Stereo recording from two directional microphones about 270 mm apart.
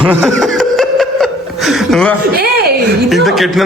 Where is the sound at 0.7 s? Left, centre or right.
Centre.